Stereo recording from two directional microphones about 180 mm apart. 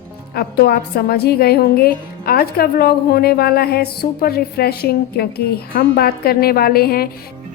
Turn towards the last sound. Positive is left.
turn(degrees=55)  # may be behind; listen again after turning